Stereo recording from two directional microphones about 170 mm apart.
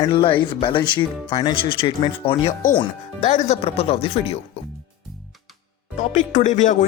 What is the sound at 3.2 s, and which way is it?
Speech, 45° left (ahead or behind).